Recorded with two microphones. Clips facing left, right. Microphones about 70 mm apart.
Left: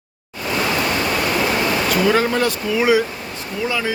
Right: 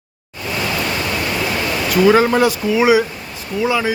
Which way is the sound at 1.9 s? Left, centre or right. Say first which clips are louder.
Right 7 dB; centre.